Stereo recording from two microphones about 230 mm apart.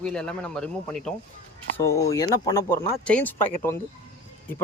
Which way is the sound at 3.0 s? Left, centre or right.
Centre.